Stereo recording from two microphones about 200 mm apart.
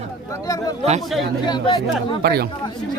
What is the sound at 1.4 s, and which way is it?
Speech, 20° left (ahead or behind).